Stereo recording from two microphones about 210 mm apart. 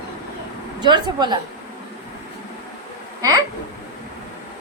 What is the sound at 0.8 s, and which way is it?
Speech, 20° right (ahead or behind).